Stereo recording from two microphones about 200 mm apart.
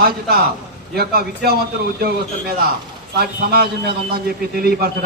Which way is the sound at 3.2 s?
50° right (ahead or behind).